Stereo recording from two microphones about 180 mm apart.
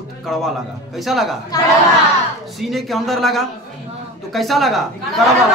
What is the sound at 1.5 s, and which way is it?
Speech, 20° left (ahead or behind).